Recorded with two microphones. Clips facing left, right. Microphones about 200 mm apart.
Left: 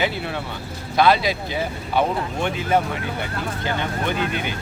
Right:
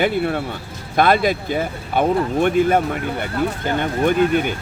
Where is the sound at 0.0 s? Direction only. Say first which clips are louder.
Right 6 dB; 50° right (ahead or behind).